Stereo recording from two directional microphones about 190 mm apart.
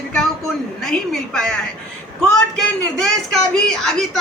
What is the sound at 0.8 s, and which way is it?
Speech, 5° left (ahead or behind).